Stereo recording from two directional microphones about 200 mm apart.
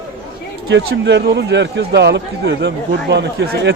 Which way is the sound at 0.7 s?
60° right (ahead or behind).